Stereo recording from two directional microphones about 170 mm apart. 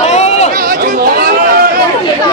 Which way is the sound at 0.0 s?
40° left (ahead or behind).